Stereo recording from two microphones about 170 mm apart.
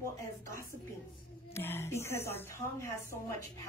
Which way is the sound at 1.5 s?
15° left (ahead or behind).